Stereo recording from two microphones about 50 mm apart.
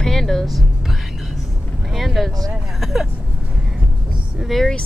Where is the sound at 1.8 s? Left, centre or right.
Centre.